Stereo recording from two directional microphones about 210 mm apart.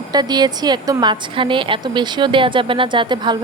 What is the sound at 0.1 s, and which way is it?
A woman's voice, 20° right (ahead or behind).